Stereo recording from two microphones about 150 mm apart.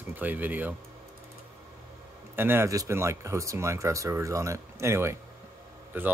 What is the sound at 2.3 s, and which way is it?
Speech, 15° right (ahead or behind).